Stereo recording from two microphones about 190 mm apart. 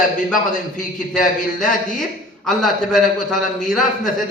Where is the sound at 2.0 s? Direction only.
Centre (ahead or behind).